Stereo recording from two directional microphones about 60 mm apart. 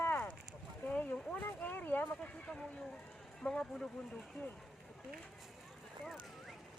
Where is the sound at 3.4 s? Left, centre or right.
Centre.